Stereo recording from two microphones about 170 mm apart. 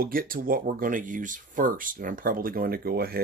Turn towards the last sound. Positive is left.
turn(degrees=-65)  # may be behind; listen again after turning